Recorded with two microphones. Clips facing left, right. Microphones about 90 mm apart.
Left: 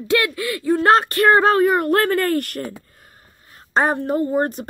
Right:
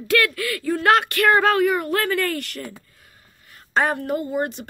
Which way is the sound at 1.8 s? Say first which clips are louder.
Left 5 dB; 50° left (ahead or behind).